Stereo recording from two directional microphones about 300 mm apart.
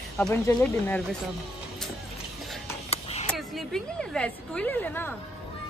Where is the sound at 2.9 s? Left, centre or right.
Centre.